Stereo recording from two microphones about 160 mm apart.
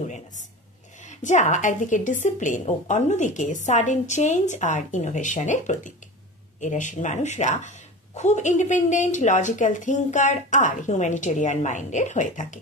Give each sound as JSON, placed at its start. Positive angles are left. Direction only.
{"t": 1.0, "sound": "speech", "side_deg": 50}